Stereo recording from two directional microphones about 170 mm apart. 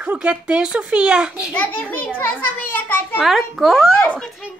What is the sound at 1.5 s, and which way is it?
A child's voice, 10° left (ahead or behind).